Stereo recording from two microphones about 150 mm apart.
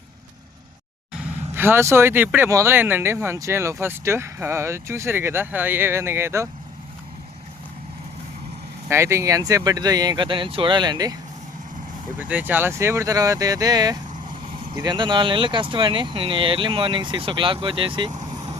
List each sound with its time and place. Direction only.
1.2 s speech: 15° right (ahead or behind)
8.9 s speech: 20° right (ahead or behind)
12.2 s speech: 10° right (ahead or behind); by 18.1 s 35° right (ahead or behind)